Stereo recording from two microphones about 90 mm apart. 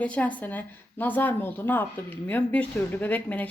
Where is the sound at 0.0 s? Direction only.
15° left (ahead or behind).